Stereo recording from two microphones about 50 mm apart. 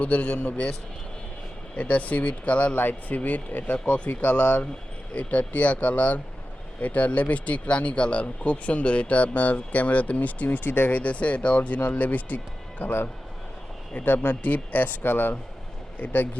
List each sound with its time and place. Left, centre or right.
0.0 s speech: left
2.7 s speech: left
5.1 s speech: left
10.9 s speech: left
16.0 s speech: left